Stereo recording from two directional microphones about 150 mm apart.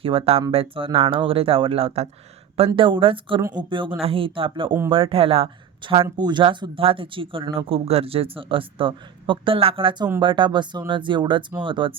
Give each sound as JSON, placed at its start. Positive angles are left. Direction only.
{"t": 0.0, "sound": "speech", "side_deg": -40}
{"t": 6.0, "sound": "speech", "side_deg": -25}